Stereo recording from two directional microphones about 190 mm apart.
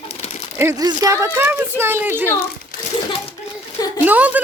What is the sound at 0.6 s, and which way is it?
Speech, 15° right (ahead or behind).